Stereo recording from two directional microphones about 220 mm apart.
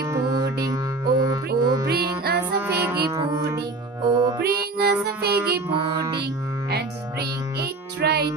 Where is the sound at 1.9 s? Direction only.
45° right (ahead or behind).